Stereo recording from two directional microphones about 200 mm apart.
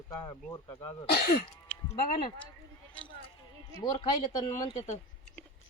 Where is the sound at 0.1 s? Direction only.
20° left (ahead or behind).